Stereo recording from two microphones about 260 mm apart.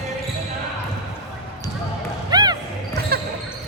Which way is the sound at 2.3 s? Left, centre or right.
Centre.